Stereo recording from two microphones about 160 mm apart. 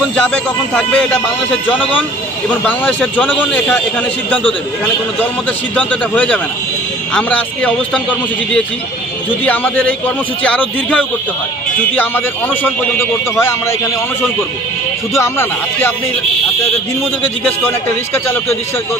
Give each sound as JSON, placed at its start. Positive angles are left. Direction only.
{"t": 0.1, "sound": "speech", "side_deg": 5}
{"t": 2.6, "sound": "a man's voice", "side_deg": 10}
{"t": 5.8, "sound": "a man's voice", "side_deg": 10}
{"t": 12.9, "sound": "a man's voice", "side_deg": 15}
{"t": 15.1, "sound": "a man's voice", "side_deg": 15}